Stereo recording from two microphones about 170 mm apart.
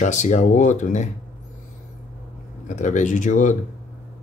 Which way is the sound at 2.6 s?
45° left (ahead or behind).